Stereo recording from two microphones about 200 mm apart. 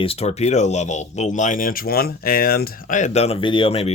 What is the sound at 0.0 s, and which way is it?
Speech, 30° left (ahead or behind).